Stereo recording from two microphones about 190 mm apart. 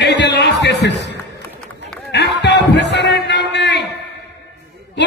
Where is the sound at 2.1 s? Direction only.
60° left (ahead or behind).